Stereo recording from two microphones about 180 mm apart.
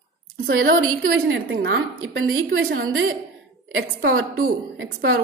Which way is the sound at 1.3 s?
90° right.